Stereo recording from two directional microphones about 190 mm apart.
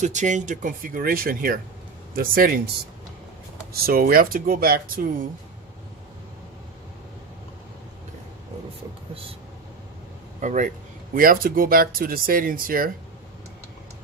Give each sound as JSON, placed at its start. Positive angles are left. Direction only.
{"t": 0.0, "sound": "speech", "side_deg": -40}
{"t": 3.7, "sound": "speech", "side_deg": -50}
{"t": 10.4, "sound": "speech", "side_deg": -40}